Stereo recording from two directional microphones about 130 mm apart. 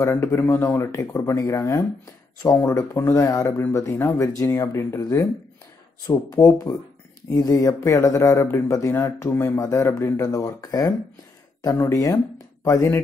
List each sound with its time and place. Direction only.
0.0 s speech: 20° left (ahead or behind)